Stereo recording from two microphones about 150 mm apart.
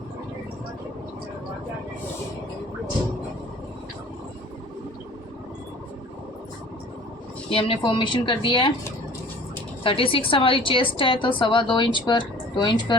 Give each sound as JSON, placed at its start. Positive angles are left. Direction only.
{"t": 7.5, "sound": "a woman's voice", "side_deg": 35}
{"t": 9.8, "sound": "a woman's voice", "side_deg": 35}